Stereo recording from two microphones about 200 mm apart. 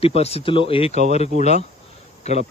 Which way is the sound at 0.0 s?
30° left (ahead or behind).